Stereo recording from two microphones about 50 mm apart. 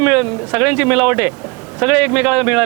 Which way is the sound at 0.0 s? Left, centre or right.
Centre.